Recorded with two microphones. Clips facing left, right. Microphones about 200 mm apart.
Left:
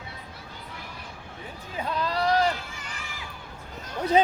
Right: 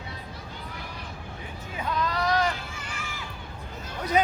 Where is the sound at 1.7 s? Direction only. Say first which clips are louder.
Even; 30° left (ahead or behind).